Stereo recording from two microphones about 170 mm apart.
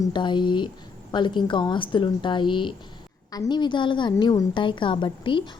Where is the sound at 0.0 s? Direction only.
25° left (ahead or behind).